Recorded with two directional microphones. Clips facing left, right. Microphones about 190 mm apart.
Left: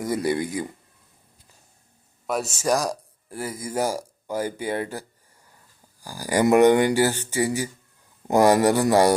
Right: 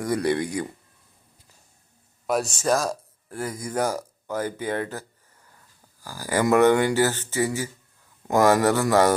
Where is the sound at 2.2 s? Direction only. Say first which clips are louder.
Right 1 dB; centre (ahead or behind).